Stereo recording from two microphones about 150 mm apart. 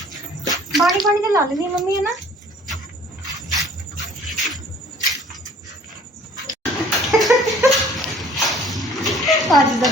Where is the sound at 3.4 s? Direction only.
Centre (ahead or behind).